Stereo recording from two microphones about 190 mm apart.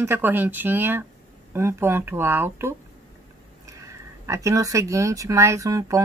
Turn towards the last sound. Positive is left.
turn(degrees=-15)  # may be behind; listen again after turning